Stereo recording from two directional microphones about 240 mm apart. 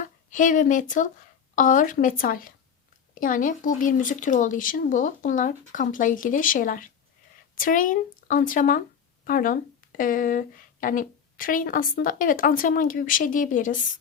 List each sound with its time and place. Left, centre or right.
0.3 s a woman's voice: left